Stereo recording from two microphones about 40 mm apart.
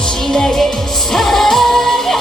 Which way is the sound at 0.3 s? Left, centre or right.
Centre.